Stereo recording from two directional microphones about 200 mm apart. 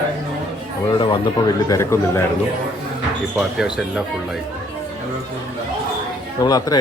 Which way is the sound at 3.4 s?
Centre (ahead or behind).